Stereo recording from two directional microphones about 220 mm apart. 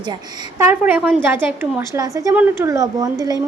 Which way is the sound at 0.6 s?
10° right (ahead or behind).